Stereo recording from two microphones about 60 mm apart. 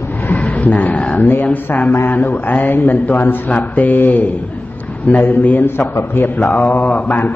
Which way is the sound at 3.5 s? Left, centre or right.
Left.